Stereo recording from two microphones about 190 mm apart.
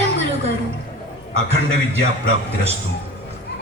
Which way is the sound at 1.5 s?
35° right (ahead or behind).